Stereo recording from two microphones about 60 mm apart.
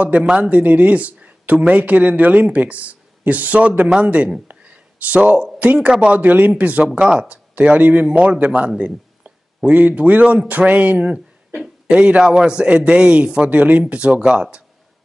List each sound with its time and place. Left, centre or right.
0.0 s speech: right
6.1 s speech: right